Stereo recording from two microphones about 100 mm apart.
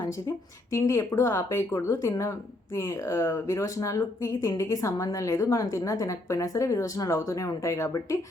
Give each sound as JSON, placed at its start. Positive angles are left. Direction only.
{"t": 0.7, "sound": "speech", "side_deg": 30}